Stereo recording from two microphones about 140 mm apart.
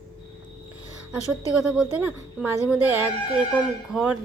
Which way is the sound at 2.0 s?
15° right (ahead or behind).